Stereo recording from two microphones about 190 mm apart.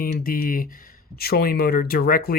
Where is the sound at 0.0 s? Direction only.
50° left (ahead or behind).